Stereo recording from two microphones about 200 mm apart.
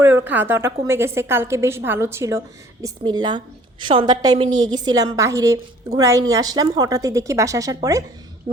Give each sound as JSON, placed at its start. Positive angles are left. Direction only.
{"t": 0.0, "sound": "a woman's voice", "side_deg": -15}